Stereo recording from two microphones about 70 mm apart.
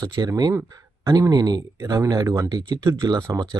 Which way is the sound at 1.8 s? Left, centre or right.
Right.